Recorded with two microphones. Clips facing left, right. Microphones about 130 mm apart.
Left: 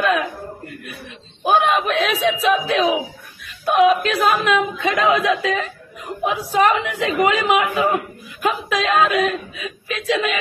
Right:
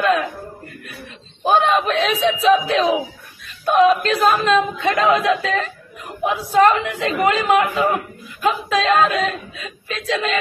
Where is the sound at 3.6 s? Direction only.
5° left (ahead or behind).